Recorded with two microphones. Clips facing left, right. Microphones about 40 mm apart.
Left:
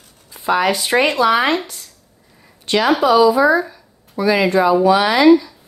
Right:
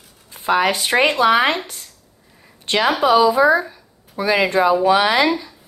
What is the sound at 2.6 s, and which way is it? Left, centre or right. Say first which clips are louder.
Speech: left 2 dB; right.